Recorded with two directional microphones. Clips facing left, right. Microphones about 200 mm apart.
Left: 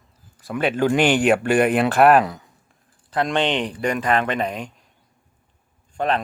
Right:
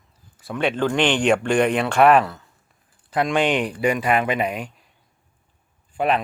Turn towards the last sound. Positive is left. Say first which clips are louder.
# right 1 dB
turn(degrees=-10)  # may be behind; listen again after turning